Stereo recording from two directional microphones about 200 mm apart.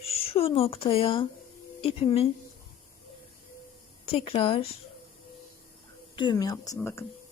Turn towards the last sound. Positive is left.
turn(degrees=10)  # may be behind; listen again after turning